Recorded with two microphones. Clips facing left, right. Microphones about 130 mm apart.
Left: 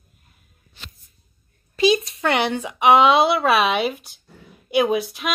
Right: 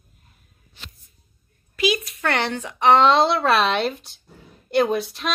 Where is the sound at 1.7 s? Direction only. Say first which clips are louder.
Left 5 dB; 30° left (ahead or behind).